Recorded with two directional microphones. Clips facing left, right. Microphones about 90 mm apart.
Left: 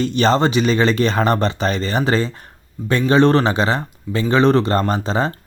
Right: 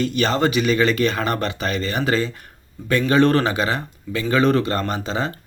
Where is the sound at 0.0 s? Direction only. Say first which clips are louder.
Left 4 dB; 30° left (ahead or behind).